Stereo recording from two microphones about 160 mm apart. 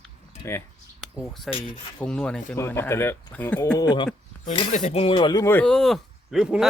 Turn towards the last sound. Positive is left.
turn(degrees=-5)  # may be behind; listen again after turning